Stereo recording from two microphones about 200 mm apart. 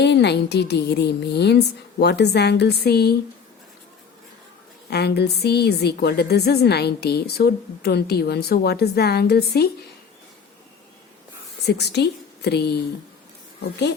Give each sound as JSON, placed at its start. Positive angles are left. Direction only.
{"t": 0.0, "sound": "a woman's voice", "side_deg": 60}
{"t": 4.9, "sound": "a woman's voice", "side_deg": 55}
{"t": 11.6, "sound": "a woman's voice", "side_deg": 55}